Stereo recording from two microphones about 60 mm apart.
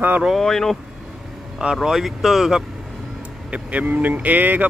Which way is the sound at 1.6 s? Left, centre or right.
Centre.